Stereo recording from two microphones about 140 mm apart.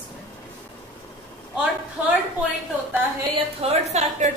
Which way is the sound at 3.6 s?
50° right (ahead or behind).